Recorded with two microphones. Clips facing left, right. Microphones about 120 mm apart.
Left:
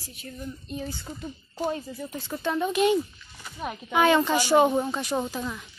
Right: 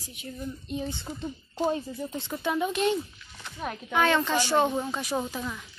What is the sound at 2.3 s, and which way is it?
Speech, 5° right (ahead or behind).